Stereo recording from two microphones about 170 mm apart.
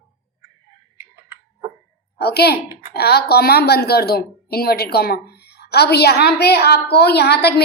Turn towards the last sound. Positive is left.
turn(degrees=70)  # may be behind; listen again after turning